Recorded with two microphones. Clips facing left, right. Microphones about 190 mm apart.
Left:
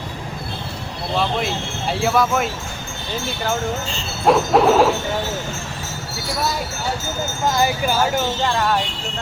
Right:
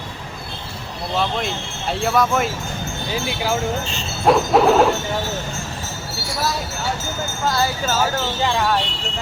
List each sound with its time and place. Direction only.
1.2 s speech: centre (ahead or behind)
7.5 s speech: 15° left (ahead or behind)
8.4 s speech: centre (ahead or behind)